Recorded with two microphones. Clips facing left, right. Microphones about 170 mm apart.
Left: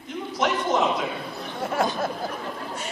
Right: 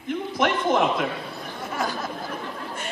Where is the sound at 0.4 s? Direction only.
55° right (ahead or behind).